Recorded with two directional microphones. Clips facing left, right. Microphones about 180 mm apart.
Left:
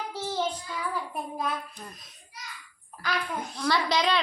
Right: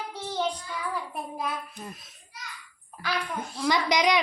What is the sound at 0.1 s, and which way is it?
Child singing, 5° left (ahead or behind).